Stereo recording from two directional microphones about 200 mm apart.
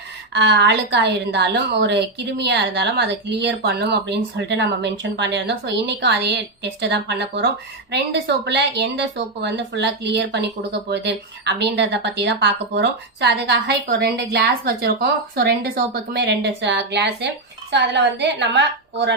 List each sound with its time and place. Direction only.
0.3 s a woman's voice: 55° right (ahead or behind)